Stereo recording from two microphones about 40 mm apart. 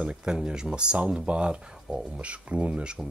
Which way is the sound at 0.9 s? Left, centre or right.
Right.